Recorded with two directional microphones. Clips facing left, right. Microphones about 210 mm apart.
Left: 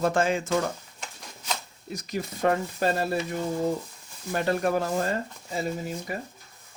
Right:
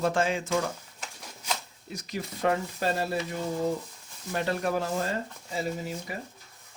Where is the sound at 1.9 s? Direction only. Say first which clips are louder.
Left 3 dB; 45° left (ahead or behind).